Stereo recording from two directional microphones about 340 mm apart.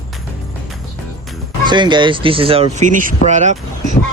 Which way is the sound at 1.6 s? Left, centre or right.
Centre.